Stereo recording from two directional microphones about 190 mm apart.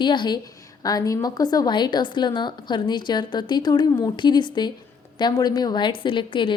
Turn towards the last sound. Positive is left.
turn(degrees=25)  # may be behind; listen again after turning